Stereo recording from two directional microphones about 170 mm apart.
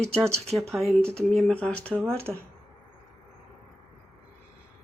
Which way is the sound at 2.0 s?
15° right (ahead or behind).